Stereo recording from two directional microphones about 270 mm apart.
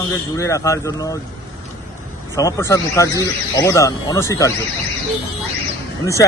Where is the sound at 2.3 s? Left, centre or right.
Centre.